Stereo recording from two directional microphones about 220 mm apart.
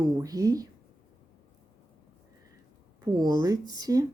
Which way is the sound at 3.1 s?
15° right (ahead or behind).